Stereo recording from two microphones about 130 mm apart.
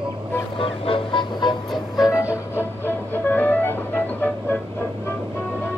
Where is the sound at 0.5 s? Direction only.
45° left (ahead or behind).